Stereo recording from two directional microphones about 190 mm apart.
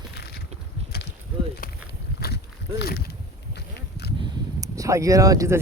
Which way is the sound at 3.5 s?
60° left (ahead or behind).